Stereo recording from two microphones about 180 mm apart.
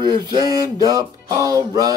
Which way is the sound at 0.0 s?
25° right (ahead or behind).